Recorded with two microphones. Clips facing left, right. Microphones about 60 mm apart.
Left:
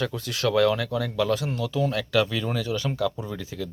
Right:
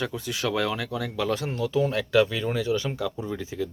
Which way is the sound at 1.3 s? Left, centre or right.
Right.